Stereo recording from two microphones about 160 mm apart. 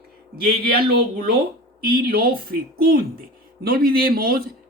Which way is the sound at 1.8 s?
65° right (ahead or behind).